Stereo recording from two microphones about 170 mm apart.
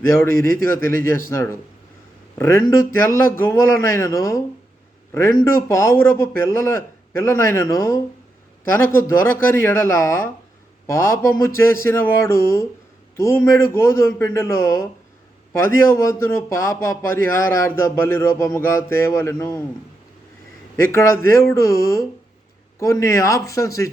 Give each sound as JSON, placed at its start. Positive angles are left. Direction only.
{"t": 0.6, "sound": "a man's voice", "side_deg": 15}
{"t": 5.6, "sound": "a man's voice", "side_deg": 15}
{"t": 20.8, "sound": "a man's voice", "side_deg": 15}